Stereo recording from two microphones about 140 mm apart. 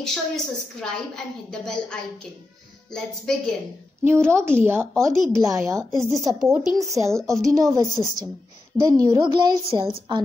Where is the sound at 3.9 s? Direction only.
20° right (ahead or behind).